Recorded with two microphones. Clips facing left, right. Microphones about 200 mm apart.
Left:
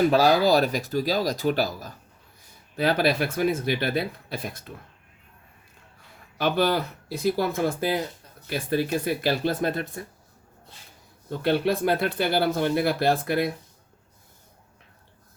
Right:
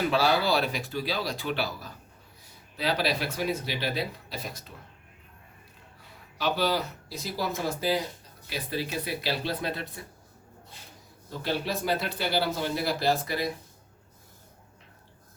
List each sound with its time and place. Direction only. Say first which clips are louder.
0.1 s speech: left 6 dB; 40° left (ahead or behind)
6.3 s speech: left 4 dB; 55° left (ahead or behind)
11.3 s speech: left 8 dB; 60° left (ahead or behind)